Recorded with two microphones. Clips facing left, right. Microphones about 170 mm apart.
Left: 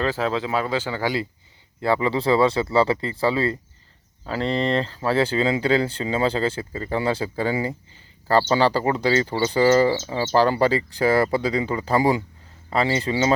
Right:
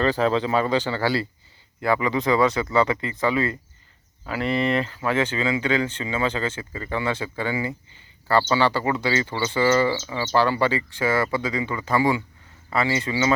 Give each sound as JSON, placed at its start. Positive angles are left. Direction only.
{"t": 0.0, "sound": "speech", "side_deg": 5}
{"t": 1.8, "sound": "speech", "side_deg": 30}